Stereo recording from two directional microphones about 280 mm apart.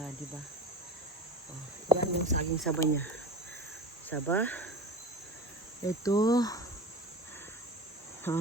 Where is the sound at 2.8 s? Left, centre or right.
Centre.